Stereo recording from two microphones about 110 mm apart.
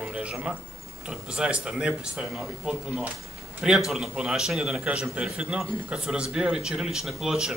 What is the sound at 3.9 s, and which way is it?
A man's voice, 5° right (ahead or behind).